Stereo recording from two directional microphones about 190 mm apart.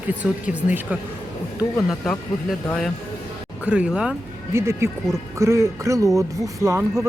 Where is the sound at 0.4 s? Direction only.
10° right (ahead or behind).